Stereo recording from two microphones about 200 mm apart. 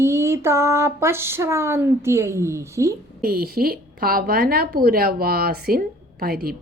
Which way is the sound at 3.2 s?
50° right (ahead or behind).